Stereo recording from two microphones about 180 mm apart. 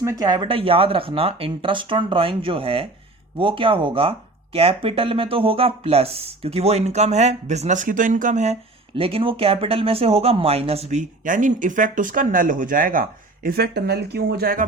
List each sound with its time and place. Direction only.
0.0 s speech: 20° right (ahead or behind)
11.3 s speech: 45° right (ahead or behind)